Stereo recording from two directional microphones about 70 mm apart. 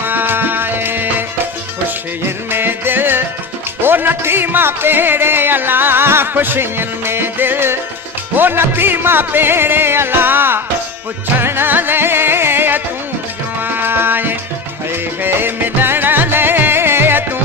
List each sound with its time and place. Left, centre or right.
0.0 s music: right
2.2 s music: right